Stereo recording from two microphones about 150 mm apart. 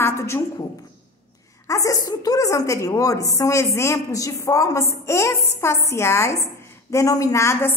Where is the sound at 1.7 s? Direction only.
20° left (ahead or behind).